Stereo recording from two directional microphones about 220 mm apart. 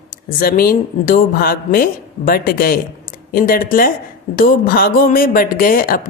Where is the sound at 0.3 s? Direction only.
40° left (ahead or behind).